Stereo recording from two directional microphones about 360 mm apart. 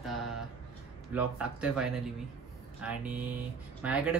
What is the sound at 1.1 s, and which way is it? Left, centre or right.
Speech, centre.